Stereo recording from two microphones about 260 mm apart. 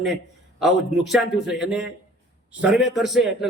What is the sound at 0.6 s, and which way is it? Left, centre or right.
A man's voice, centre.